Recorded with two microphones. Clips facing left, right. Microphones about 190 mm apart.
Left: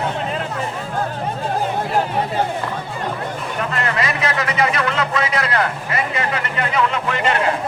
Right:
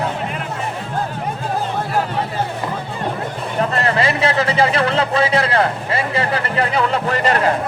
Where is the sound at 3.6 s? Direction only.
35° right (ahead or behind).